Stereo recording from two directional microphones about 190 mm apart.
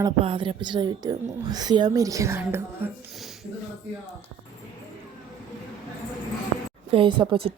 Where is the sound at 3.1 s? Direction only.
Centre (ahead or behind).